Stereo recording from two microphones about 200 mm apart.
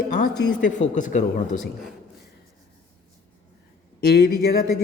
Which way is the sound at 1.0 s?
40° left (ahead or behind).